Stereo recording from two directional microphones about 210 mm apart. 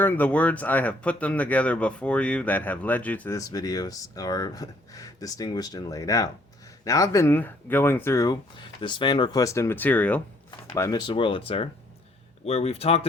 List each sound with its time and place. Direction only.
0.0 s speech: 10° left (ahead or behind)
10.8 s speech: 20° left (ahead or behind)